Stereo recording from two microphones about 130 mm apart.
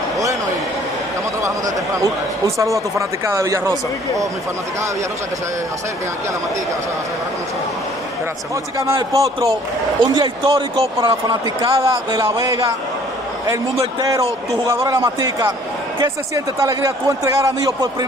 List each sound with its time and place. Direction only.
2.4 s a man's voice: 25° right (ahead or behind)
8.7 s a man's voice: 25° right (ahead or behind); by 11.8 s 40° right (ahead or behind)
11.8 s a man's voice: 25° right (ahead or behind)